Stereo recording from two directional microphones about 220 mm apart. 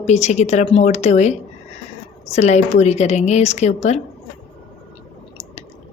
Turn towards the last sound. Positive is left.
turn(degrees=30)  # may be behind; listen again after turning